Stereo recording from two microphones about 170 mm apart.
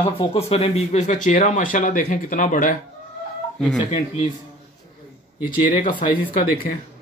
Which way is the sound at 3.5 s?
Centre (ahead or behind).